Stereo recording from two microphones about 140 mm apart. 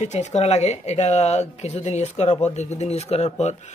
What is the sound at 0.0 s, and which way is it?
Speech, 55° left (ahead or behind).